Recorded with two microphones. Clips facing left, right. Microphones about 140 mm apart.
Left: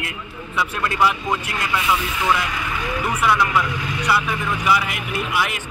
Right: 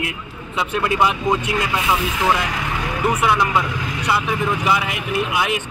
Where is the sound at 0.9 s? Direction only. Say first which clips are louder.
Right 2 dB; 20° right (ahead or behind).